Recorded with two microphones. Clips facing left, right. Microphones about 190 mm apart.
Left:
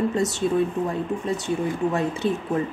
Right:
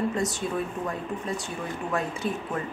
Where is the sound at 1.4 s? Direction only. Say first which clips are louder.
Left 9 dB; 25° left (ahead or behind).